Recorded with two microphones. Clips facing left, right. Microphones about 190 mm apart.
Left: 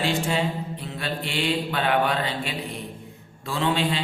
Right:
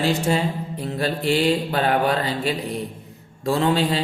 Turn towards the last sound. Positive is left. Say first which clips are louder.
# right 4 dB
turn(degrees=-40)  # may be behind; listen again after turning